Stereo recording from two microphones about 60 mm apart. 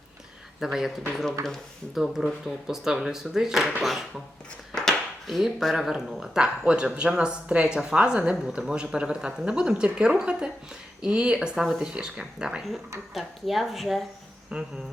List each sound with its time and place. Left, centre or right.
0.6 s speech: centre
2.0 s speech: centre
4.7 s a sound: centre
5.9 s speech: centre
13.1 s speech: centre
14.5 s speech: centre